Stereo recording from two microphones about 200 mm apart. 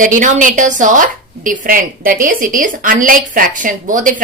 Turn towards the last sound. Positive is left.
turn(degrees=-40)  # may be behind; listen again after turning